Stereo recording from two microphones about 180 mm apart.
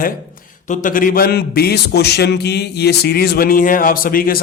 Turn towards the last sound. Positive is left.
turn(degrees=50)  # may be behind; listen again after turning